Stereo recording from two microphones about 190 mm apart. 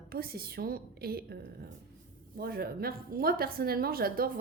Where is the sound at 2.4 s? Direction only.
55° right (ahead or behind).